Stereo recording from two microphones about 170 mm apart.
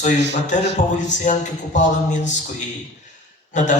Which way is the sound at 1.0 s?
45° left (ahead or behind).